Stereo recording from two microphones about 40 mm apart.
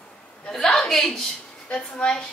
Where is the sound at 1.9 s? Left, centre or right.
Centre.